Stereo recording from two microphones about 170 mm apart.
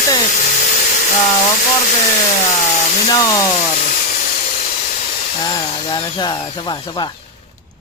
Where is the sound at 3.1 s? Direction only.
20° left (ahead or behind).